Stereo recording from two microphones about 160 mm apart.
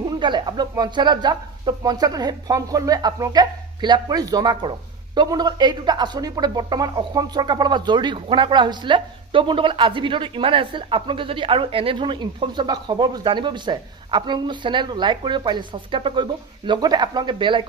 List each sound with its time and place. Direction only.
0.2 s speech: 30° right (ahead or behind)